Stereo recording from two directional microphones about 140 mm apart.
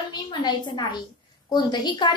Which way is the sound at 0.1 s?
30° left (ahead or behind).